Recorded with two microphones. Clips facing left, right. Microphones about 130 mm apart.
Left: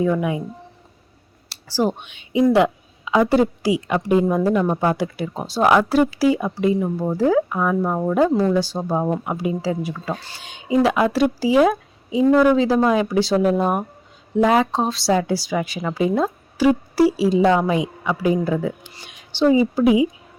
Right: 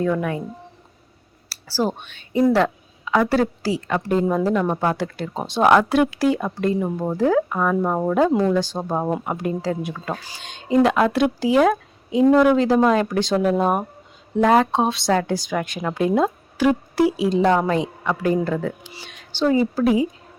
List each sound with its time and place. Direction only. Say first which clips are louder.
0.0 s a woman's voice: left 2 dB; 10° left (ahead or behind)
1.5 s a sound: even; 25° left (ahead or behind)
2.0 s a woman's voice: left 1 dB; 15° left (ahead or behind); by 8.3 s 5° right (ahead or behind)
8.5 s a woman's voice: left 1 dB; 10° left (ahead or behind)